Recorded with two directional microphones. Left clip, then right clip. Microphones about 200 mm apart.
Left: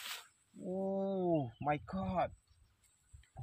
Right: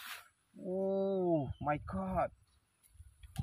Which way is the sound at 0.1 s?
Centre (ahead or behind).